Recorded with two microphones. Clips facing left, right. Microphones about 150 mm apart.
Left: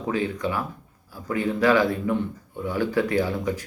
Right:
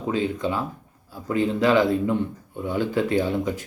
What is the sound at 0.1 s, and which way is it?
Speech, 20° right (ahead or behind).